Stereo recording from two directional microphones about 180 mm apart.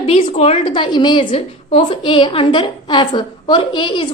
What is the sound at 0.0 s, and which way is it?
A woman's voice, 35° left (ahead or behind).